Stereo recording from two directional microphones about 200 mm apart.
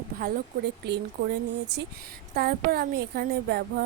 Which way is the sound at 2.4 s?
50° right (ahead or behind).